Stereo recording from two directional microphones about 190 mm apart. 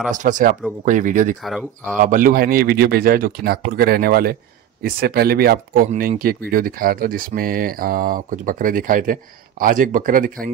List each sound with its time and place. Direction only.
0.1 s speech: 40° right (ahead or behind)
1.4 s speech: centre (ahead or behind)
2.0 s speech: 45° right (ahead or behind)